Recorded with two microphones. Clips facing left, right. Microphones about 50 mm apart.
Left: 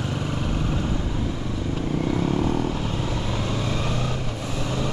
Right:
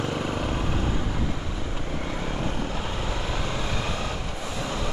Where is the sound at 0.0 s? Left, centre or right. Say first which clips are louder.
Even; right.